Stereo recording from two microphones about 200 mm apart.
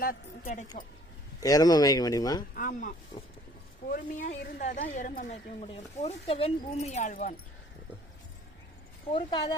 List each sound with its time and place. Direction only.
0.0 s a woman's voice: 45° left (ahead or behind)
1.4 s speech: 15° left (ahead or behind)
2.6 s a woman's voice: 40° left (ahead or behind)
9.0 s speech: 25° left (ahead or behind)